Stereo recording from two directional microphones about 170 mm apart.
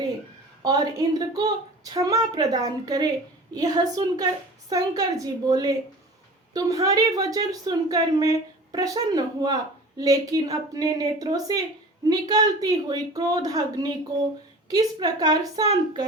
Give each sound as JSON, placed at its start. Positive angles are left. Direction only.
{"t": 0.6, "sound": "a woman's voice", "side_deg": -20}